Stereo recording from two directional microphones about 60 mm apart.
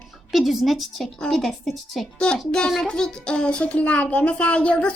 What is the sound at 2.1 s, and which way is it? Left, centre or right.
A child's voice, centre.